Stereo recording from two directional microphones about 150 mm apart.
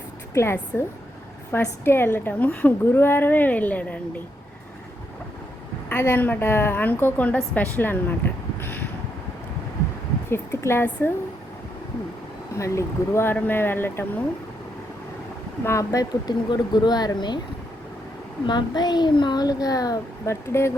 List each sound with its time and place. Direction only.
0.3 s a woman's voice: 15° left (ahead or behind)
5.9 s a woman's voice: 15° left (ahead or behind)
10.2 s speech: 15° left (ahead or behind)
12.5 s a woman's voice: 20° left (ahead or behind)
15.6 s a woman's voice: 20° left (ahead or behind)
18.4 s a woman's voice: 30° left (ahead or behind)